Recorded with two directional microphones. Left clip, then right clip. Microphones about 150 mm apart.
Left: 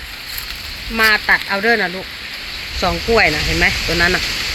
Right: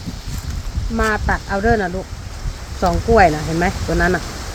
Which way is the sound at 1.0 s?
65° right (ahead or behind).